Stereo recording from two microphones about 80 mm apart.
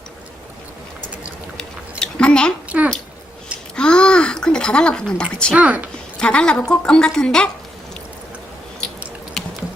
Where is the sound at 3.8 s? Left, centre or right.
Centre.